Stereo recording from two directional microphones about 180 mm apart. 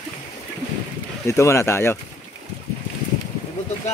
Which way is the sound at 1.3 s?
15° left (ahead or behind).